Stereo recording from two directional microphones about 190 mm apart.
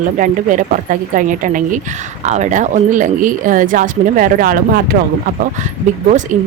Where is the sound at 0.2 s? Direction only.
45° right (ahead or behind).